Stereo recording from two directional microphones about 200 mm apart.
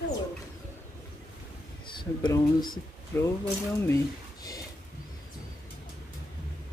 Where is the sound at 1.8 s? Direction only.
20° left (ahead or behind).